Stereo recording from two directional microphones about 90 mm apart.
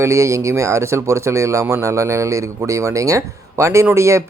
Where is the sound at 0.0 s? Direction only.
35° right (ahead or behind).